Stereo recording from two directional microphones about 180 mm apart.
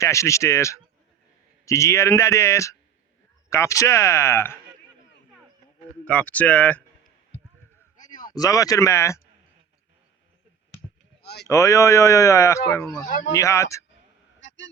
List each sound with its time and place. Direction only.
0.0 s speech: 15° left (ahead or behind)
6.1 s speech: 5° left (ahead or behind)
7.9 s a sound: 45° left (ahead or behind)
8.3 s speech: 20° left (ahead or behind)
11.4 s speech: 15° left (ahead or behind)
14.4 s a sound: 90° left